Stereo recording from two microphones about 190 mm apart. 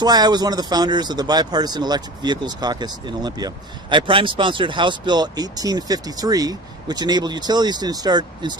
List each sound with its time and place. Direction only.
0.0 s speech: 20° right (ahead or behind)